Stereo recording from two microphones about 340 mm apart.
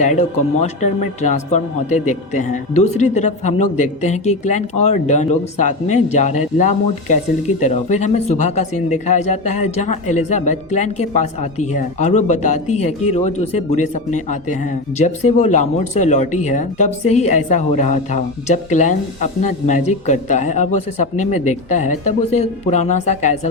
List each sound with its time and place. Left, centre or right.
0.0 s speech: left